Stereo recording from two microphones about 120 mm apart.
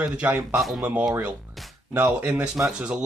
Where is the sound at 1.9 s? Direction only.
15° right (ahead or behind).